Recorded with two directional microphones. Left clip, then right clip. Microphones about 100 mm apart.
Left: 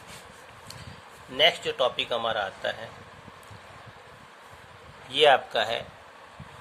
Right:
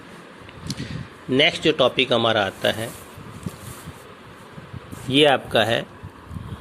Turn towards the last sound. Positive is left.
turn(degrees=-65)  # may be behind; listen again after turning